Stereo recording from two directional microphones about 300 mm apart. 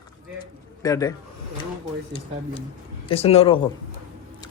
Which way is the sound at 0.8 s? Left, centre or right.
Centre.